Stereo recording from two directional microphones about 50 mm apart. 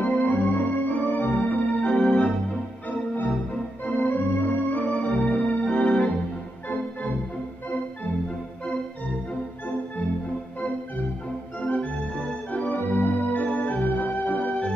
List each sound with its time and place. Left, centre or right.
0.0 s organ: left
1.8 s organ: left
3.8 s organ: left
11.6 s organ: left